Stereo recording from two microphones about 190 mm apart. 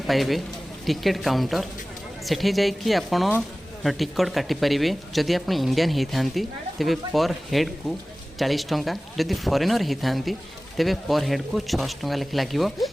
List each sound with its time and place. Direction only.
0.1 s speech: centre (ahead or behind)